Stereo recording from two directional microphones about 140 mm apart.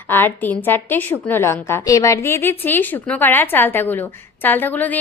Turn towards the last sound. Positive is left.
turn(degrees=10)  # may be behind; listen again after turning